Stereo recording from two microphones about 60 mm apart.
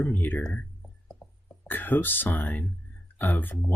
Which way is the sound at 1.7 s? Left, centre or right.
Left.